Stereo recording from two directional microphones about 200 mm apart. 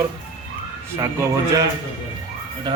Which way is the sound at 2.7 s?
20° right (ahead or behind).